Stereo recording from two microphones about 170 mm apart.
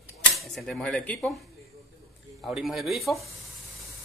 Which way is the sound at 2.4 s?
Centre (ahead or behind).